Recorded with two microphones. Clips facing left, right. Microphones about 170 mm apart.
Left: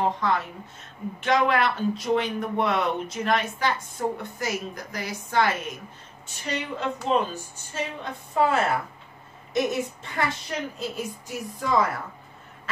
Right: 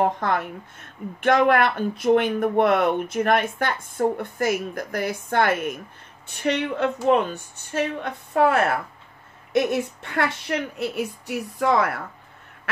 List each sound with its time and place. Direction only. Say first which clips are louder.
0.0 s a woman's voice: right 3 dB; 55° right (ahead or behind)